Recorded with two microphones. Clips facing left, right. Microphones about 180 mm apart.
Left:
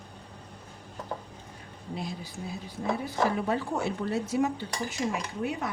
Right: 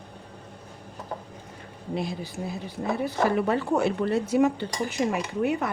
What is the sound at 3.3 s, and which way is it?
Speech, 65° right (ahead or behind).